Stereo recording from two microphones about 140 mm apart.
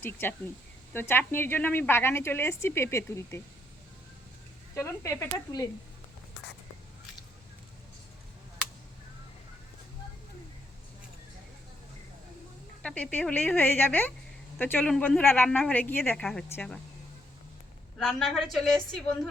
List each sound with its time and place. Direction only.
0.0 s speech: 15° left (ahead or behind)
4.7 s speech: 20° left (ahead or behind)
12.8 s speech: 10° left (ahead or behind)
18.0 s a woman's voice: 5° left (ahead or behind)